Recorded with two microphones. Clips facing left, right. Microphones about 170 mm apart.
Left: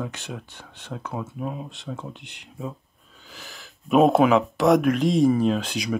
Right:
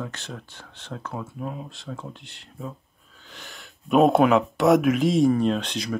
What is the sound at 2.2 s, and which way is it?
Speech, 15° left (ahead or behind).